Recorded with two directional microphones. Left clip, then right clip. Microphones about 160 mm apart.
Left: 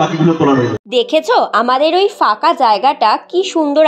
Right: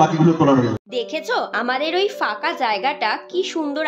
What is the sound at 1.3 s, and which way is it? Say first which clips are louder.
A woman's voice: left 8 dB; 30° left (ahead or behind).